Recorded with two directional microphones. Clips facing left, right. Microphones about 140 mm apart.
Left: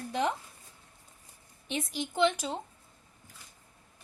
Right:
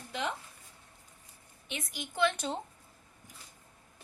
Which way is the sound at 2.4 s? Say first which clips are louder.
Even; centre (ahead or behind).